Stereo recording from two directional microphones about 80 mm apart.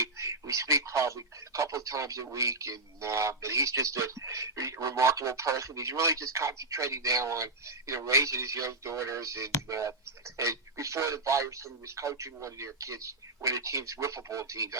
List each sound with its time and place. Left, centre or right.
0.0 s speech: right